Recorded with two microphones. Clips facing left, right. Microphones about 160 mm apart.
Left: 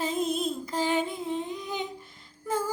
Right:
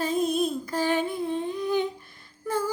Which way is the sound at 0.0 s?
25° left (ahead or behind).